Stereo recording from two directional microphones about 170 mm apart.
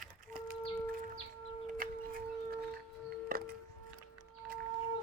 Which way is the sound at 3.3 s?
60° right (ahead or behind).